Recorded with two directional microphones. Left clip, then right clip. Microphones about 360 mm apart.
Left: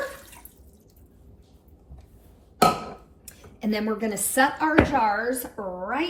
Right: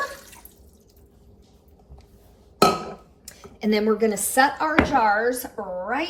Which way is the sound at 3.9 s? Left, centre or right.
Centre.